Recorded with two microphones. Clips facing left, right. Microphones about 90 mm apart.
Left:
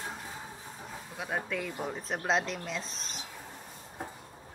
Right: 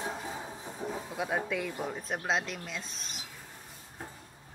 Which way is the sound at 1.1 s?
Centre (ahead or behind).